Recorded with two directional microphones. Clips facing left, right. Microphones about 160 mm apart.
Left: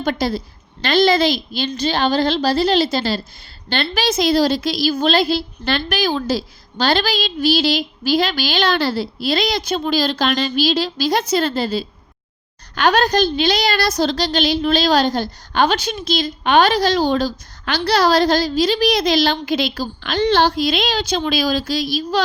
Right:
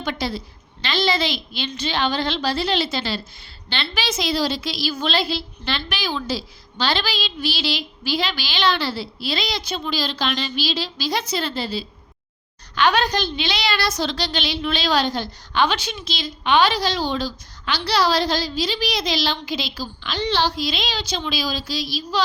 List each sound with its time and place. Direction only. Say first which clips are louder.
0.0 s a woman's voice: left 6 dB; 45° left (ahead or behind)